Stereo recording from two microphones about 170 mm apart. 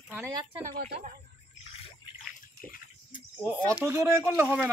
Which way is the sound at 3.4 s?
10° right (ahead or behind).